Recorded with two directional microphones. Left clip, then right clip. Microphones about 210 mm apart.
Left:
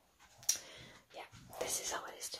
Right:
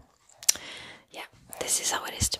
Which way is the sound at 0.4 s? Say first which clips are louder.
Right 11 dB; 40° right (ahead or behind).